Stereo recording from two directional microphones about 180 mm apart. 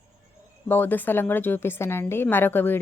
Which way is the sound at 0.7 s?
10° left (ahead or behind).